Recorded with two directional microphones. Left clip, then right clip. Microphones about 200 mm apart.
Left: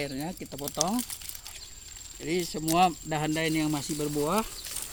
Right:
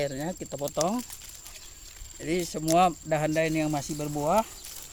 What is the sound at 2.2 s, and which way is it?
Speech, 45° right (ahead or behind).